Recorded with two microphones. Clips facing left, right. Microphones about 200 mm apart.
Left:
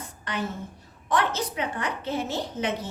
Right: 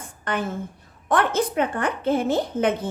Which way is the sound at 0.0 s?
55° right (ahead or behind).